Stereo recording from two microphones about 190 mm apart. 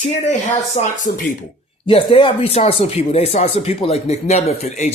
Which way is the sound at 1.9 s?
30° left (ahead or behind).